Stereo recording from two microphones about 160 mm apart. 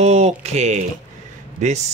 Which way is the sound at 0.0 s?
45° right (ahead or behind).